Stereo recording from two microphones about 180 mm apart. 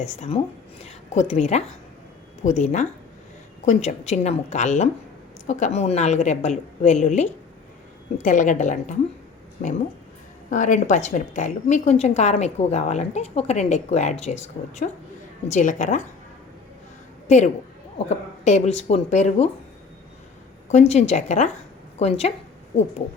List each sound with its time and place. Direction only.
0.0 s a woman's voice: 35° left (ahead or behind)
10.5 s a woman's voice: 45° left (ahead or behind)
17.2 s a woman's voice: 40° left (ahead or behind)
20.7 s a woman's voice: 40° left (ahead or behind)